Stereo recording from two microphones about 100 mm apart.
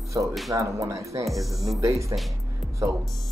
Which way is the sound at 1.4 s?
Centre (ahead or behind).